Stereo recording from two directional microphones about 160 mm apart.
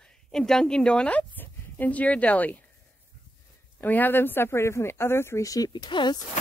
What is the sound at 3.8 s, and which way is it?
Speech, 10° left (ahead or behind).